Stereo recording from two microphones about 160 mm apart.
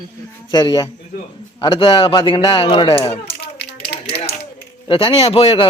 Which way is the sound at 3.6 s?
90° left.